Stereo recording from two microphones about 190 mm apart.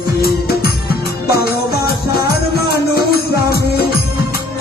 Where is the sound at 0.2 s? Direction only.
55° left (ahead or behind).